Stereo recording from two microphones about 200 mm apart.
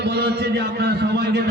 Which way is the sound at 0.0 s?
55° right (ahead or behind).